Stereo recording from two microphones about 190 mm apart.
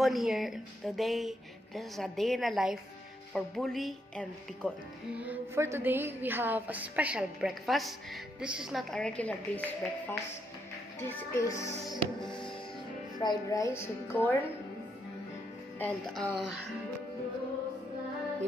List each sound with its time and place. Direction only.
0.0 s a woman's voice: centre (ahead or behind)
5.1 s a woman's voice: 10° right (ahead or behind); by 11.7 s 15° left (ahead or behind)
13.2 s a woman's voice: 20° left (ahead or behind)
15.8 s a woman's voice: centre (ahead or behind)